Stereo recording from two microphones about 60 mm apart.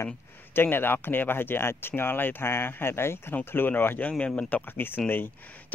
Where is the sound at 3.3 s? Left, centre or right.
Left.